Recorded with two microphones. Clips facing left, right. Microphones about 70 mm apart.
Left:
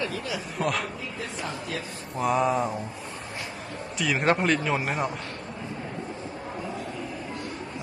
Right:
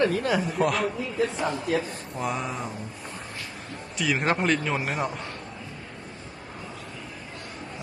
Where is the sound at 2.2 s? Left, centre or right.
Centre.